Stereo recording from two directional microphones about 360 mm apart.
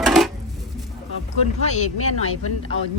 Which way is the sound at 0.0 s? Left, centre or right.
Centre.